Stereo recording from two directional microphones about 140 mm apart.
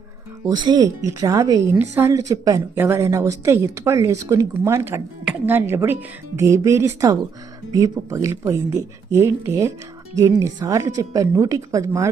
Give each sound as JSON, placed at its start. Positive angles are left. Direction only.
{"t": 0.4, "sound": "a woman's voice", "side_deg": -30}